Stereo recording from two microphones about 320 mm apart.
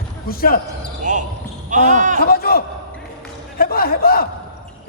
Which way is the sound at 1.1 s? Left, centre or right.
Right.